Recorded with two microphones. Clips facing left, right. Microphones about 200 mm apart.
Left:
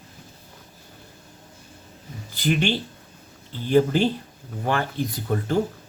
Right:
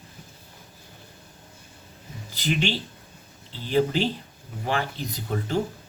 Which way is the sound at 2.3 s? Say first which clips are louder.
Left 3 dB; 50° left (ahead or behind).